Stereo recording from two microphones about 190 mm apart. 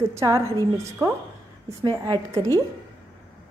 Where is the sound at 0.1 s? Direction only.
15° right (ahead or behind).